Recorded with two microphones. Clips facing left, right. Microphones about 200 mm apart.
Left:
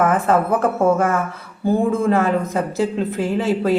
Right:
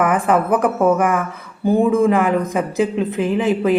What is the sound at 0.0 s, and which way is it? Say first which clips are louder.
A woman's voice: even; 15° right (ahead or behind).